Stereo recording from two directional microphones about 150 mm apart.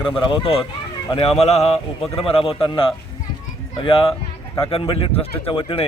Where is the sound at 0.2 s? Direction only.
35° left (ahead or behind).